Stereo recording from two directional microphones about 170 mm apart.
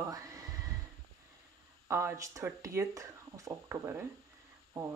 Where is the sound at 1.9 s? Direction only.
15° right (ahead or behind).